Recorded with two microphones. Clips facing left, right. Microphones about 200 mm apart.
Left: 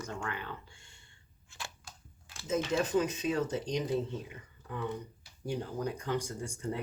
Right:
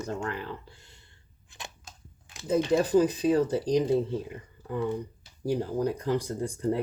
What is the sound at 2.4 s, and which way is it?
Speech, 35° right (ahead or behind).